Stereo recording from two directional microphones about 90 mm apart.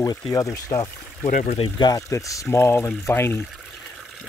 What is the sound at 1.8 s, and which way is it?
Speech, 40° left (ahead or behind).